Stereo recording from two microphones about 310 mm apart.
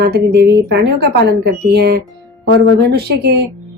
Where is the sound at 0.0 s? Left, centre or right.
Right.